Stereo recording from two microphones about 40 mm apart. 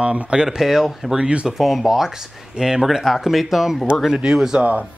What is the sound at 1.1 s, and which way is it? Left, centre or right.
Speech, right.